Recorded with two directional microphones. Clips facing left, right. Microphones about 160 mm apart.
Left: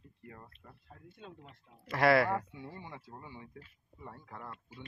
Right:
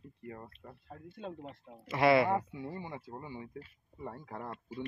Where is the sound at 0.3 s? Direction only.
30° right (ahead or behind).